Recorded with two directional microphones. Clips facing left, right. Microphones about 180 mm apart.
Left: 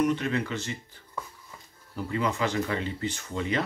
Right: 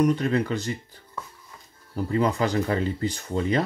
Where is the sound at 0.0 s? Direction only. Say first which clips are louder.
Right 4 dB; 35° right (ahead or behind).